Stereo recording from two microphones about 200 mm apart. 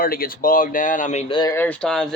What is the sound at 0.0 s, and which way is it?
Speech, 45° left (ahead or behind).